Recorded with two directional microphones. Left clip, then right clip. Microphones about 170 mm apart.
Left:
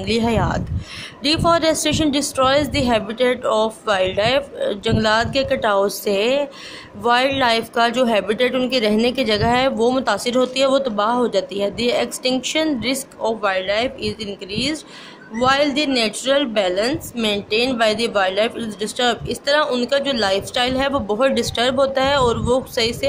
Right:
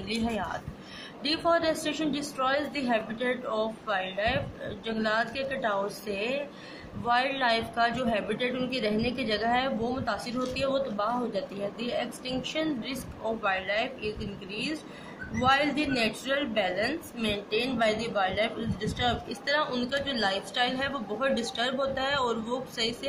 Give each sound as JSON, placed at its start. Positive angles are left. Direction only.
{"t": 0.0, "sound": "speech", "side_deg": 55}